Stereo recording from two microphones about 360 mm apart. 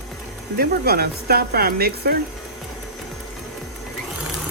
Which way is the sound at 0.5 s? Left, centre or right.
Right.